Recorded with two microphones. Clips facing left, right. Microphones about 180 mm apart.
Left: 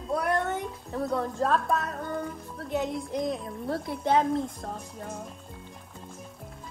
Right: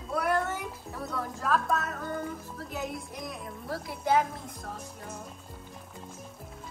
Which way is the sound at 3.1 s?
25° left (ahead or behind).